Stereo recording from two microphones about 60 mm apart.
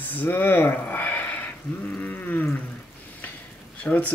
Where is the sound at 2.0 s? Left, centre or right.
Left.